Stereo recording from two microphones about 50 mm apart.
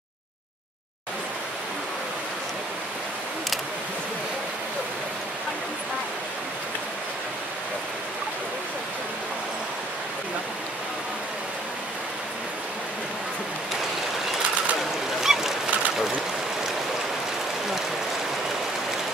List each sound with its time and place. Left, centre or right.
14.8 s goose: centre